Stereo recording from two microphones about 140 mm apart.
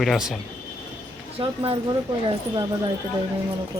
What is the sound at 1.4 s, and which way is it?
Speech, 40° right (ahead or behind).